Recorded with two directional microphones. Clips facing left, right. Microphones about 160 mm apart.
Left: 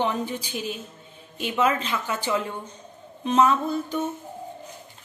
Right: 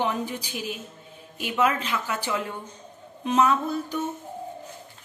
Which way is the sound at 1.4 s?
5° right (ahead or behind).